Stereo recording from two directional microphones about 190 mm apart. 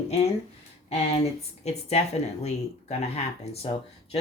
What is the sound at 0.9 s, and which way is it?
Speech, 35° left (ahead or behind).